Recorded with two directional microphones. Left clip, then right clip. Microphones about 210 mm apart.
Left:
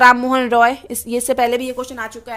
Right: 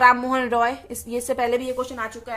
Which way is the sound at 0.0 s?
35° left (ahead or behind).